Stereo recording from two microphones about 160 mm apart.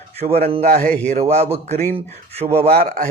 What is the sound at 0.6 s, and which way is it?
Speech, 65° right (ahead or behind).